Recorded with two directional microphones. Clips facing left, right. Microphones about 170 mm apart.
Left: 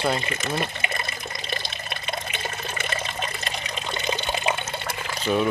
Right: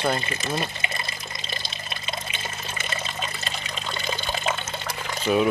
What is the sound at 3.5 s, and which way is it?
Water, 20° left (ahead or behind).